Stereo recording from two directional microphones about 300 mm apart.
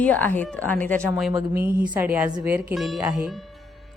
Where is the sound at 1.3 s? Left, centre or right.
Centre.